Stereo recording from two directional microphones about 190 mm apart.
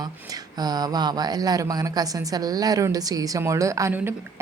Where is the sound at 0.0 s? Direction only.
20° right (ahead or behind).